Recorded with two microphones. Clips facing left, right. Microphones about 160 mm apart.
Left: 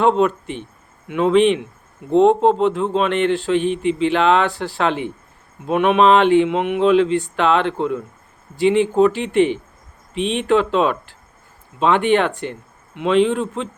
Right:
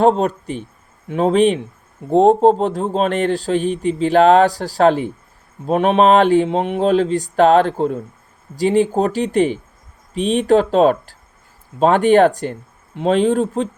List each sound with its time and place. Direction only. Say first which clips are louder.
0.0 s a man's voice: right 1 dB; 40° right (ahead or behind)